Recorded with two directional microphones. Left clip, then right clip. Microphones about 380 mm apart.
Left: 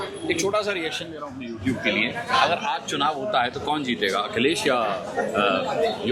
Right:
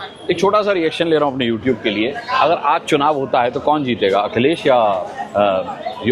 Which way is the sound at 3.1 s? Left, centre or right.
Centre.